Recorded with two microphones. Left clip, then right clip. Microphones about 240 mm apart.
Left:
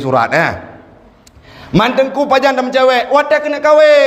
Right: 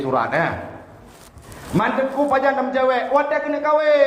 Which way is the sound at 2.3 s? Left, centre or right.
Left.